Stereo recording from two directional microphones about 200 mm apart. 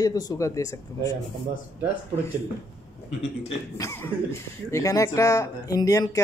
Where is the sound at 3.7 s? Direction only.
15° left (ahead or behind).